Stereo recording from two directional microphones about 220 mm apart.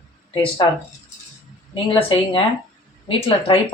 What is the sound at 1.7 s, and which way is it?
Speech, 25° left (ahead or behind).